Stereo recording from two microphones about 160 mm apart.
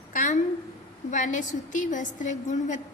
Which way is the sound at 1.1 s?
50° left (ahead or behind).